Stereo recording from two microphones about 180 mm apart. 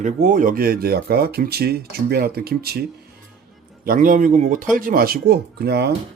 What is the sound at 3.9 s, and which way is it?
Speech, 50° right (ahead or behind).